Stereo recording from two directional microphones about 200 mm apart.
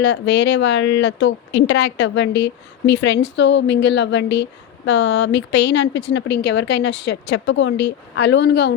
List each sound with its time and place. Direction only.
0.0 s speech: 60° left (ahead or behind)